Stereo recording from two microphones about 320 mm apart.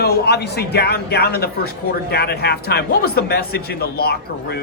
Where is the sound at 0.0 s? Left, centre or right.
Left.